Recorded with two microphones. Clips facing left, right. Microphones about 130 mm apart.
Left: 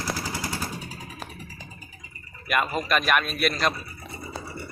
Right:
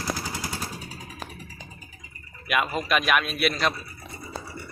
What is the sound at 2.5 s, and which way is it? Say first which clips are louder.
A man's voice: even; centre (ahead or behind).